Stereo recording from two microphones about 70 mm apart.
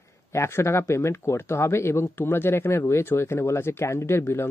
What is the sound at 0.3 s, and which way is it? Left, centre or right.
Speech, left.